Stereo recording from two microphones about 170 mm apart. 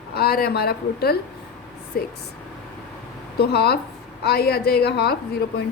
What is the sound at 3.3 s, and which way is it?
A woman's voice, 70° left (ahead or behind).